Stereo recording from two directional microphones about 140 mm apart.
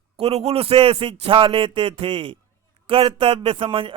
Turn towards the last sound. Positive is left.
turn(degrees=-40)  # may be behind; listen again after turning